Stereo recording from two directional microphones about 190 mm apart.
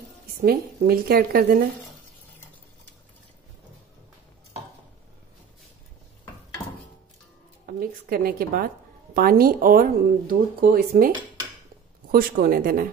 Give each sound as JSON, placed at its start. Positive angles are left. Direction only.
{"t": 0.4, "sound": "speech", "side_deg": -50}
{"t": 7.6, "sound": "speech", "side_deg": -50}
{"t": 12.1, "sound": "speech", "side_deg": -50}